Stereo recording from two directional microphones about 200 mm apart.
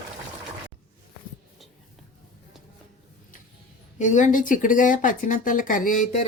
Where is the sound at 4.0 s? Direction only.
40° left (ahead or behind).